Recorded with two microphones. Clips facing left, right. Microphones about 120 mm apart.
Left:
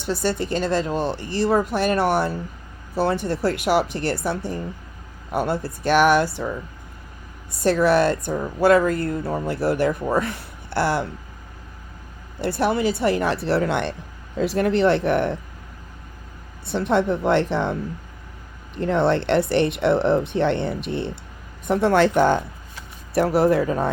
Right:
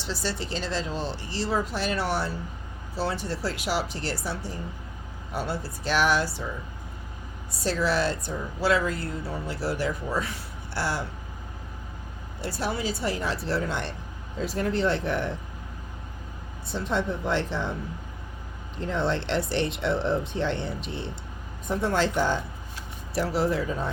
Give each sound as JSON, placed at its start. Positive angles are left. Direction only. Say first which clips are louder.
{"t": 0.0, "sound": "speech", "louder": "left 8 dB", "side_deg": 55}
{"t": 7.6, "sound": "speech", "louder": "left 8 dB", "side_deg": 55}
{"t": 12.4, "sound": "speech", "louder": "left 9 dB", "side_deg": 60}
{"t": 16.6, "sound": "speech", "louder": "left 8 dB", "side_deg": 65}
{"t": 18.8, "sound": "speech", "louder": "left 8 dB", "side_deg": 65}
{"t": 21.7, "sound": "speech", "louder": "left 8 dB", "side_deg": 70}